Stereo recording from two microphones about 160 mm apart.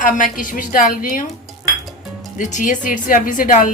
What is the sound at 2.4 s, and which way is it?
Speech, 55° left (ahead or behind).